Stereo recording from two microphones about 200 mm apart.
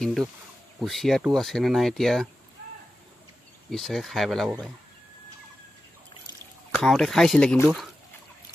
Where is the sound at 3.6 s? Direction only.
Centre (ahead or behind).